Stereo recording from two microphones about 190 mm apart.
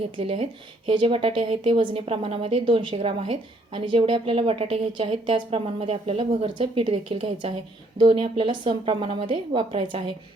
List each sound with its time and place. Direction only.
0.2 s a woman's voice: 30° right (ahead or behind)